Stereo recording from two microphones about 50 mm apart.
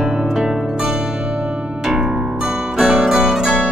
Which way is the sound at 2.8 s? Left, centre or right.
Centre.